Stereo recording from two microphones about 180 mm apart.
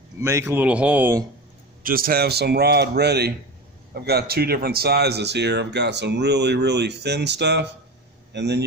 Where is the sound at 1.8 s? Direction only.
50° right (ahead or behind).